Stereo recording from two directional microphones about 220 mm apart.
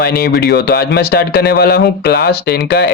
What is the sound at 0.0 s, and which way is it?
Speech, 45° left (ahead or behind).